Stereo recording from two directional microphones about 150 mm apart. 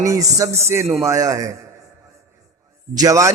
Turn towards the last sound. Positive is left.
turn(degrees=-20)  # may be behind; listen again after turning